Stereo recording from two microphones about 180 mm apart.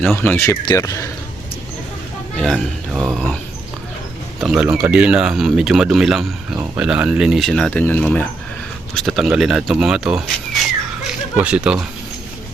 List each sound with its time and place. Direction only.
0.2 s speech: 15° left (ahead or behind)
2.4 s speech: centre (ahead or behind)
4.4 s speech: 5° right (ahead or behind)